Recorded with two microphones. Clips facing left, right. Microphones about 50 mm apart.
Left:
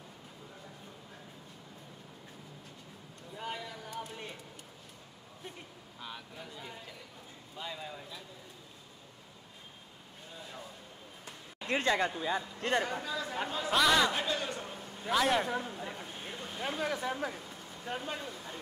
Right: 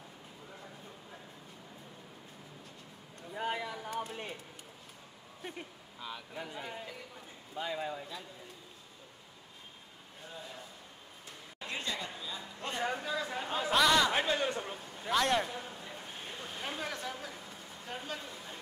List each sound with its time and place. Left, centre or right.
3.3 s a man's voice: right
5.9 s speech: centre
6.3 s a man's voice: right
11.6 s speech: left
13.0 s speech: centre
13.7 s speech: centre
14.1 s a man's voice: right
15.0 s speech: centre
15.8 s a sound: centre
17.2 s speech: left
17.8 s speech: centre